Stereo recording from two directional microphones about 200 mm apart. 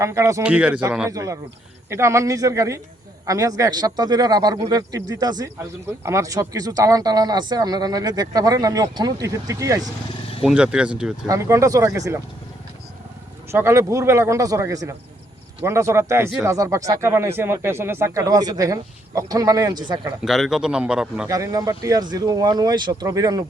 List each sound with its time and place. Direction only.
0.0 s speech: 15° right (ahead or behind)
10.4 s a man's voice: 5° right (ahead or behind)
11.3 s speech: 15° right (ahead or behind)
13.5 s speech: 15° right (ahead or behind)
20.2 s a man's voice: centre (ahead or behind)
21.2 s speech: 15° right (ahead or behind)